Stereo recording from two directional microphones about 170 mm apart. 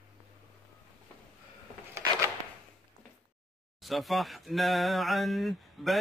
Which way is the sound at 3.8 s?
Centre (ahead or behind).